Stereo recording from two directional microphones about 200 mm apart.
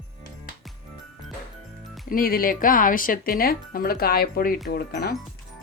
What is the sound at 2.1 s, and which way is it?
Speech, 45° left (ahead or behind).